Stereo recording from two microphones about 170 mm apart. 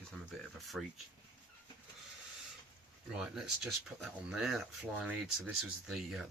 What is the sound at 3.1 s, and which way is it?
Speech, centre (ahead or behind).